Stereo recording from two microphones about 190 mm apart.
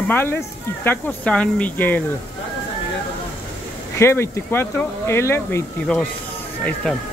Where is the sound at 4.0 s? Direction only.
15° left (ahead or behind).